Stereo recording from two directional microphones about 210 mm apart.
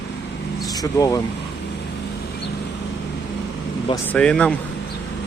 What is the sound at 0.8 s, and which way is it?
Speech, 15° left (ahead or behind).